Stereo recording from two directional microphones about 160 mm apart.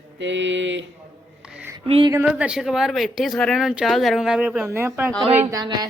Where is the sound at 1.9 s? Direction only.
35° right (ahead or behind).